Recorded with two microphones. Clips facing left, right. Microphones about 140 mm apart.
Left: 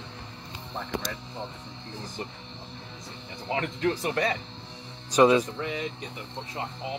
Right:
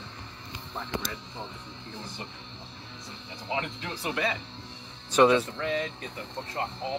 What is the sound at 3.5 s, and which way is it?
Speech, 45° left (ahead or behind).